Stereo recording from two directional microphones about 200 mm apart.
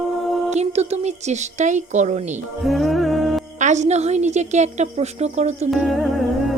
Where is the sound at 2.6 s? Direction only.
Centre (ahead or behind).